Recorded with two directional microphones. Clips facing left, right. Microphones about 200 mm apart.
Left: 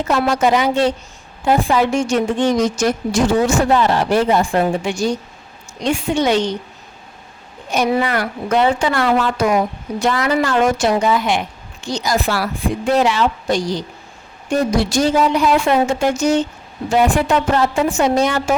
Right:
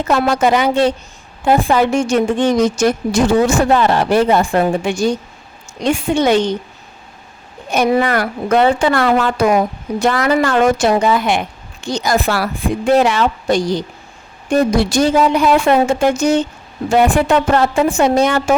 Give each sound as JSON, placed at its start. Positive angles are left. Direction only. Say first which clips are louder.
{"t": 0.1, "sound": "a woman's voice", "louder": "right 2 dB", "side_deg": -60}
{"t": 7.7, "sound": "a woman's voice", "louder": "right 3 dB", "side_deg": -55}
{"t": 14.8, "sound": "a woman's voice", "louder": "right 2 dB", "side_deg": -55}